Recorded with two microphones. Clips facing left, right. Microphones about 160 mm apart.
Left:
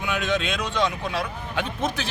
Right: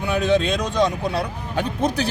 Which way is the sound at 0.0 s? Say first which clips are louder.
Right 6 dB; 35° right (ahead or behind).